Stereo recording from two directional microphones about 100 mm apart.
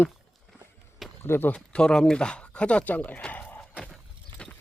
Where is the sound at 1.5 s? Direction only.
10° left (ahead or behind).